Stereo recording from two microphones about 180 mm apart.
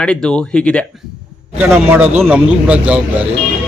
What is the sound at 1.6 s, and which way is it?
A man's voice, 10° right (ahead or behind).